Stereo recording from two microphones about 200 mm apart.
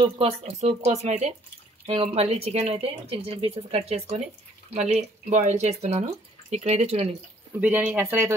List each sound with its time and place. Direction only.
0.0 s speech: 30° right (ahead or behind)
7.6 s speech: 10° right (ahead or behind)